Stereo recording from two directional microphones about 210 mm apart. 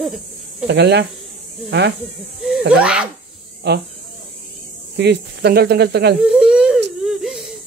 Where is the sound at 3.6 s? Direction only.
50° right (ahead or behind).